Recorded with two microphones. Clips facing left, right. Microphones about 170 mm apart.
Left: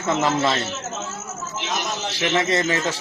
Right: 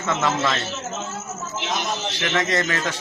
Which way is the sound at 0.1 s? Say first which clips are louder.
Left 2 dB; 30° left (ahead or behind).